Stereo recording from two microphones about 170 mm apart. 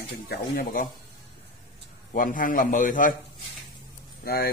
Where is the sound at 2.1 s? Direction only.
55° left (ahead or behind).